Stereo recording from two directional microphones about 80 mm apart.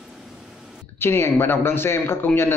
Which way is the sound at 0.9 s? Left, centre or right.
Left.